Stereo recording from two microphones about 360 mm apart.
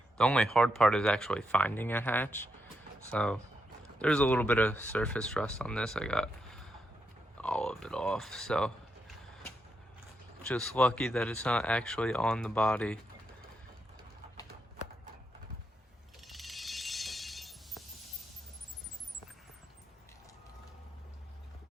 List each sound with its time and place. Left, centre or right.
0.2 s speech: centre
10.4 s speech: centre
16.2 s a sound: centre